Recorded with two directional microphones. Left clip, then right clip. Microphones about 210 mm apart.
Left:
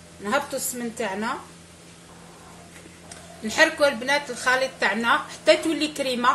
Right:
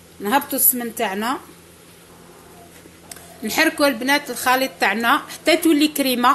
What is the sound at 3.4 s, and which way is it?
A woman's voice, 40° right (ahead or behind).